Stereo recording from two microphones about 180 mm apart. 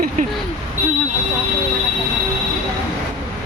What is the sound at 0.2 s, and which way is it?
Vehicle, 50° right (ahead or behind).